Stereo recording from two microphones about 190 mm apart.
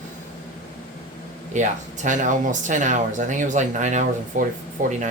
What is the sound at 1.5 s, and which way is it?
Speech, 40° right (ahead or behind).